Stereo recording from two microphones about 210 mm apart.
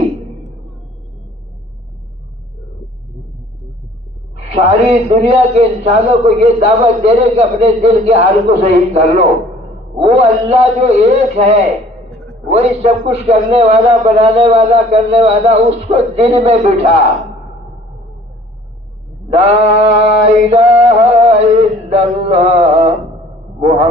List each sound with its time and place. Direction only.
4.4 s a man's voice: 30° right (ahead or behind)
12.5 s a man's voice: 30° right (ahead or behind)
19.3 s a man's voice: 30° right (ahead or behind)
20.9 s a sound: 30° right (ahead or behind)
23.6 s a man's voice: 30° right (ahead or behind)